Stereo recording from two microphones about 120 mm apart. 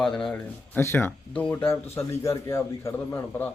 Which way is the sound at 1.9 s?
25° left (ahead or behind).